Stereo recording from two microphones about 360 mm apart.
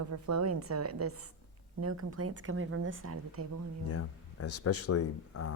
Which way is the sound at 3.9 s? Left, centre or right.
Left.